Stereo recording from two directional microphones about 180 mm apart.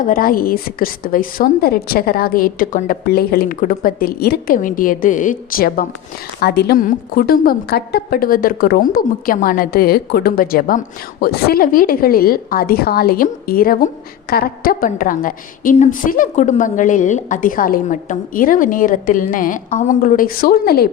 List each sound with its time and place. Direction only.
0.0 s a woman's voice: 50° left (ahead or behind)
6.4 s a woman's voice: 65° left (ahead or behind)